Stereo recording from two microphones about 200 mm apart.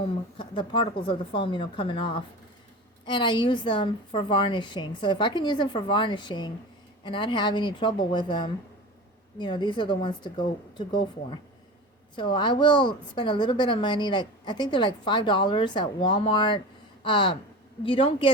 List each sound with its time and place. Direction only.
0.0 s a woman's voice: 25° left (ahead or behind)
17.0 s a sound: 25° left (ahead or behind)
17.8 s a woman's voice: 25° left (ahead or behind)